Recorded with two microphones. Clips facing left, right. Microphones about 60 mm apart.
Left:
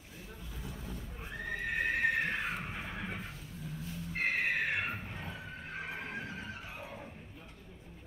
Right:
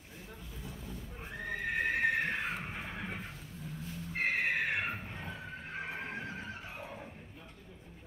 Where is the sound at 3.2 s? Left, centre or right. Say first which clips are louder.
Even; right.